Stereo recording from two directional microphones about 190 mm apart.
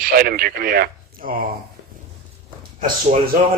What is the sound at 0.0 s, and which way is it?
A man's voice, 50° right (ahead or behind).